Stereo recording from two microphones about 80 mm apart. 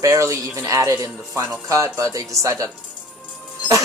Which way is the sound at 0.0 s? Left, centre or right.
Right.